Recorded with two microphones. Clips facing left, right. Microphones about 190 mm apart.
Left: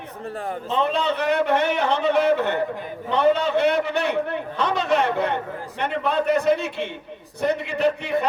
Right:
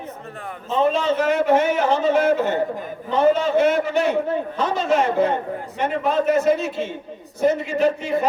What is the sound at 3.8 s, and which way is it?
A man's voice, 65° left (ahead or behind).